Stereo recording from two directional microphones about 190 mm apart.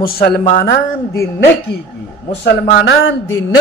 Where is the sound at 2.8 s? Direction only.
70° left (ahead or behind).